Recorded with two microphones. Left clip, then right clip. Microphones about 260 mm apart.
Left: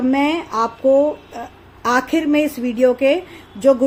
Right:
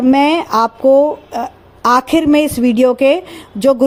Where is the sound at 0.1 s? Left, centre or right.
Right.